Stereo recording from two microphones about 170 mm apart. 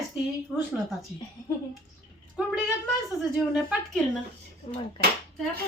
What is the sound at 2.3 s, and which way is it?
A woman's voice, 5° right (ahead or behind).